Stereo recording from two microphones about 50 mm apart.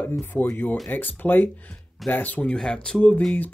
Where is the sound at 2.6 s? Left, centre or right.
Centre.